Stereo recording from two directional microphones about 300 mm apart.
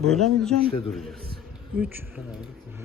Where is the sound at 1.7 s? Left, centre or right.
Centre.